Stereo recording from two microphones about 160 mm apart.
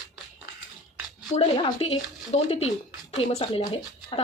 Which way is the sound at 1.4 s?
35° left (ahead or behind).